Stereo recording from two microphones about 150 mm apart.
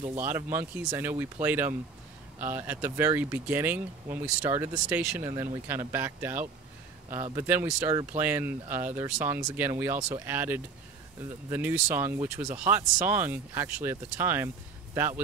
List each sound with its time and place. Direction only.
0.1 s speech: 15° right (ahead or behind)
5.3 s speech: 25° right (ahead or behind)
5.7 s speech: 15° right (ahead or behind)